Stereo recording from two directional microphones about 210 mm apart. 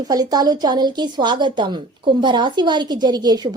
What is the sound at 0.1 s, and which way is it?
A woman's voice, 20° right (ahead or behind).